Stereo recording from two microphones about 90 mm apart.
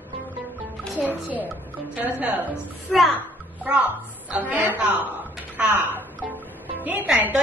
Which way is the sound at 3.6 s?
15° right (ahead or behind).